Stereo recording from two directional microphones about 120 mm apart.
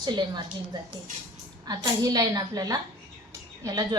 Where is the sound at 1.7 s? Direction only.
30° right (ahead or behind).